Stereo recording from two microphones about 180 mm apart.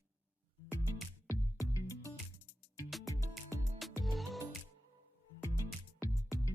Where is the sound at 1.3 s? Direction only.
15° left (ahead or behind).